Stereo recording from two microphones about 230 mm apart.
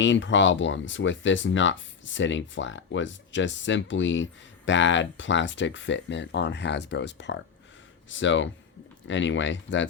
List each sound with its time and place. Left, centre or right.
0.0 s speech: left